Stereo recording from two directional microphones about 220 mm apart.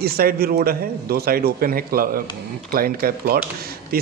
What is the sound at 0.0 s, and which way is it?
A man's voice, 45° right (ahead or behind).